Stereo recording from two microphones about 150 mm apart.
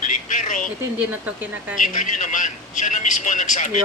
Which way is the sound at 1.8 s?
55° left (ahead or behind).